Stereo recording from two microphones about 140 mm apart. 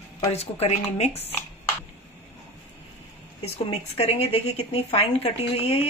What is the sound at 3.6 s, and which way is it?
Speech, 50° left (ahead or behind).